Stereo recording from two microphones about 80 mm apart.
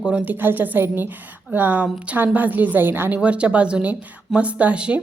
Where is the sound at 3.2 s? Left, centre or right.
Centre.